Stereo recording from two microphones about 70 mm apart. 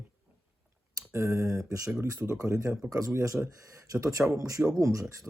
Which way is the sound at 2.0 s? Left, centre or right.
Right.